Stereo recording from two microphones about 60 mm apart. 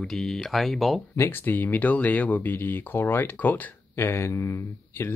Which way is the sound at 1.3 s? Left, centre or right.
Left.